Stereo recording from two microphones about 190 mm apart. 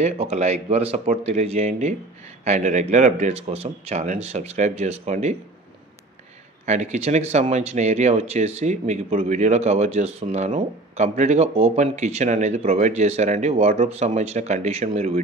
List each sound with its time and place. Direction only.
0.0 s speech: 35° right (ahead or behind)
6.6 s speech: 35° right (ahead or behind)